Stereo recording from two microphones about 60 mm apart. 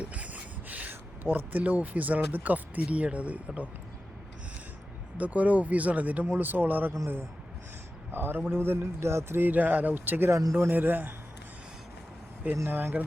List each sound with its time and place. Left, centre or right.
0.0 s speech: right
5.1 s speech: right
6.2 s speech: right
8.1 s speech: right
12.6 s speech: right